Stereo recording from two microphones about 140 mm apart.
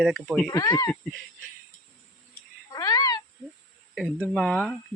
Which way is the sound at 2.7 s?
25° left (ahead or behind).